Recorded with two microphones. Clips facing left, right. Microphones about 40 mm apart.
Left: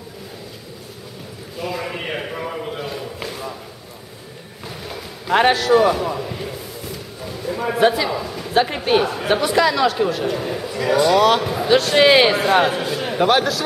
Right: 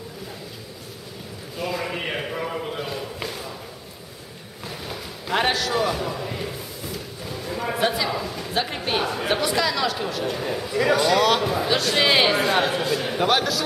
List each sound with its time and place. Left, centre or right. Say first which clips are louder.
1.6 s a sound: left 1 dB; centre
4.6 s run: left 2 dB; centre
5.3 s a man's voice: left 8 dB; centre
5.9 s a sound: left 4 dB; centre
7.9 s a man's voice: left 3 dB; centre
8.5 s a man's voice: left 8 dB; centre
9.0 s speech: left 4 dB; centre
11.7 s a man's voice: left 8 dB; centre